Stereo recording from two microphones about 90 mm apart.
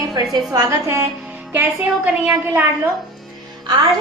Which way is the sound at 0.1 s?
50° right (ahead or behind).